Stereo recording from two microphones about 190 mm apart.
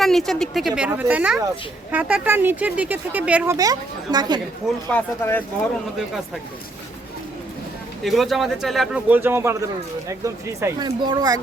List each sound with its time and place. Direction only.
0.0 s a man's voice: centre (ahead or behind)
0.8 s speech: 10° right (ahead or behind)
4.9 s speech: 10° left (ahead or behind)
8.0 s a man's voice: centre (ahead or behind); by 11.3 s 20° right (ahead or behind)